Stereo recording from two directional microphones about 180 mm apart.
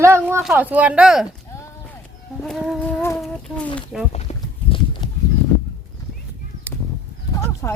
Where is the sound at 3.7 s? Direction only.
Centre (ahead or behind).